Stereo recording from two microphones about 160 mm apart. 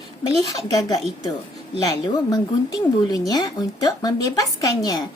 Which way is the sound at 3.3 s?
25° left (ahead or behind).